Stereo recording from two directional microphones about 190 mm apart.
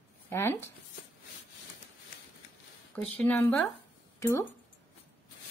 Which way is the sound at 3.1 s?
10° left (ahead or behind).